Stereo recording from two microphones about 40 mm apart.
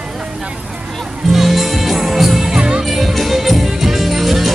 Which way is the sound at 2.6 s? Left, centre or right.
Right.